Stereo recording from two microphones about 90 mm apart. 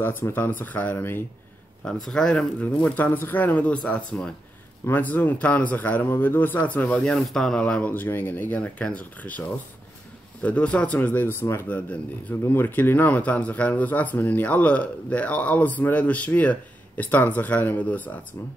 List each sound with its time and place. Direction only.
0.0 s a man's voice: 25° left (ahead or behind)
1.9 s speech: 5° left (ahead or behind)
3.0 s a man's voice: 20° left (ahead or behind)
7.0 s speech: centre (ahead or behind)
7.9 s a man's voice: 20° left (ahead or behind)